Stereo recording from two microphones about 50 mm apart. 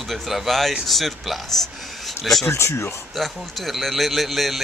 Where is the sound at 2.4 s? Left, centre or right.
Left.